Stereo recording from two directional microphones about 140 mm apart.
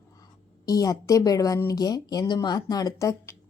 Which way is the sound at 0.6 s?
25° left (ahead or behind).